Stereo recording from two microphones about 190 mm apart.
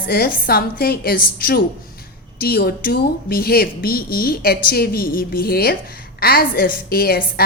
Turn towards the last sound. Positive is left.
turn(degrees=55)  # may be behind; listen again after turning